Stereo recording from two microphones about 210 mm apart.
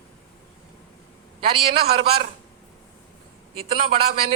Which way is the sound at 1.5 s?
25° right (ahead or behind).